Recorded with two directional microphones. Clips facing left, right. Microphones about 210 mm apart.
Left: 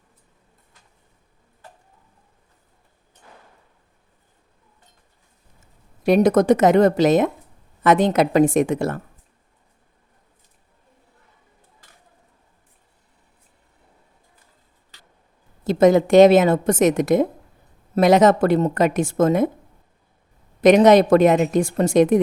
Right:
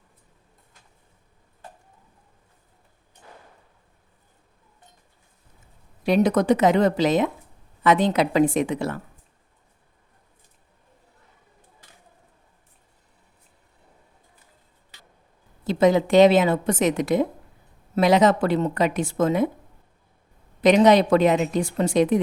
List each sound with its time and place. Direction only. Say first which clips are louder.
6.1 s speech: left 4 dB; 45° left (ahead or behind)
15.6 s speech: left 4 dB; 45° left (ahead or behind)
20.6 s speech: left 4 dB; 45° left (ahead or behind)